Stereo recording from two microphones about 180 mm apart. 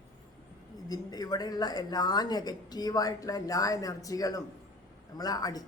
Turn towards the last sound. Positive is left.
turn(degrees=20)  # may be behind; listen again after turning